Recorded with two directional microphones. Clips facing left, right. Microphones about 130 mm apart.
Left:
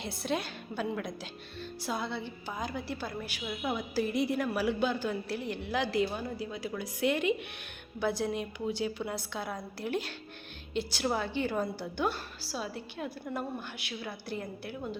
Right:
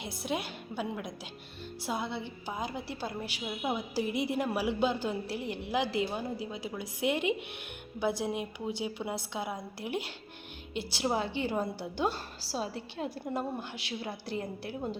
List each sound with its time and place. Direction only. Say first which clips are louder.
0.0 s a woman's voice: left 1 dB; 15° right (ahead or behind); by 14.8 s 30° right (ahead or behind)